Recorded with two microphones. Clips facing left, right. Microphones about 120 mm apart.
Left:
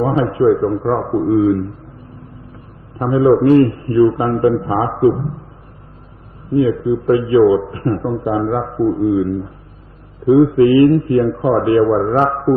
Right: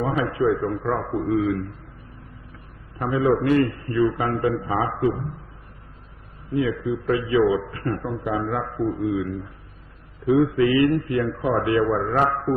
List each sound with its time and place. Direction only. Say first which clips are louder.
0.0 s a man's voice: left 8 dB; 30° left (ahead or behind)
3.0 s a man's voice: left 9 dB; 30° left (ahead or behind)
6.5 s a man's voice: left 9 dB; 30° left (ahead or behind)